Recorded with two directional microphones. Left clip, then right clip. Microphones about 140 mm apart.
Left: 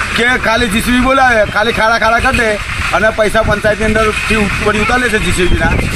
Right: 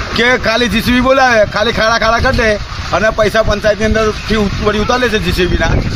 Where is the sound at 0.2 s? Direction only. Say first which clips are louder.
Right 2 dB; 35° right (ahead or behind).